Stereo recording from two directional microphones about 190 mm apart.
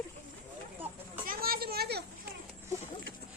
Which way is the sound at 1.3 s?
50° right (ahead or behind).